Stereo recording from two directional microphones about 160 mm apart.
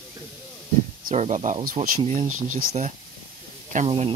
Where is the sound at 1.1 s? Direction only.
45° right (ahead or behind).